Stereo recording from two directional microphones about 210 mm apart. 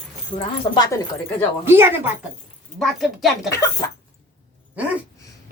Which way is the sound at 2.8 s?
Centre (ahead or behind).